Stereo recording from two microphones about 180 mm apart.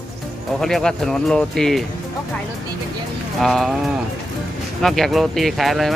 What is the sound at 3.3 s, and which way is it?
Speech, centre (ahead or behind).